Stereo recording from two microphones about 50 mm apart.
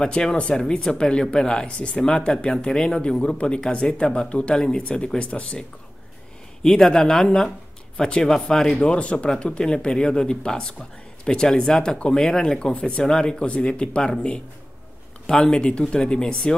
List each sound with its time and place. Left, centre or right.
0.0 s speech: centre
8.8 s speech: centre